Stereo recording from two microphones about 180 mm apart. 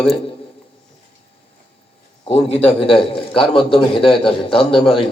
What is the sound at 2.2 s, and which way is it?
A man's voice, 35° left (ahead or behind).